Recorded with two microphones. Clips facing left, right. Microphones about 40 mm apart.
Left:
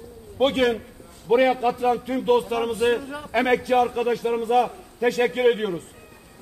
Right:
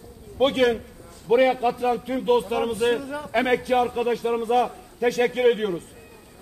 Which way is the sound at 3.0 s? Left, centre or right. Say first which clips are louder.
Right 2 dB; left.